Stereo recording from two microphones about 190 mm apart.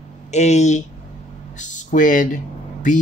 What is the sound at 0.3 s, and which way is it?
Speech, 35° left (ahead or behind).